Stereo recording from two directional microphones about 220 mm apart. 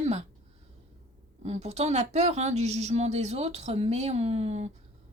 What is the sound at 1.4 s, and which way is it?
Speech, 30° right (ahead or behind).